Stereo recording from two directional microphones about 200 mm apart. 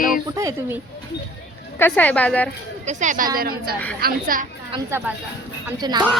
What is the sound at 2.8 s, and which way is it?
Speech, 40° right (ahead or behind).